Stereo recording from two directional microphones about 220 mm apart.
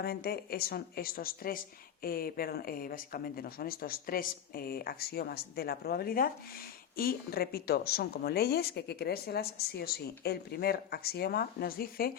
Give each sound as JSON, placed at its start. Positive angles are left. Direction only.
{"t": 0.0, "sound": "a woman's voice", "side_deg": 45}